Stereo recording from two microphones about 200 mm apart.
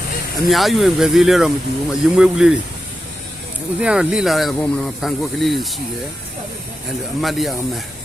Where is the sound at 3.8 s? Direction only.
5° right (ahead or behind).